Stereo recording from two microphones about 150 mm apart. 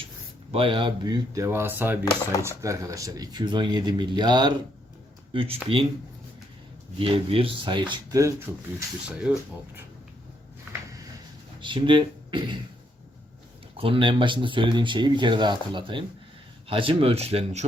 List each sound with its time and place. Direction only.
0.5 s speech: 35° right (ahead or behind)
7.0 s speech: 40° right (ahead or behind)
8.5 s speech: centre (ahead or behind)
10.7 s a sound: 20° right (ahead or behind)
11.6 s speech: 35° right (ahead or behind)
13.7 s speech: 35° right (ahead or behind)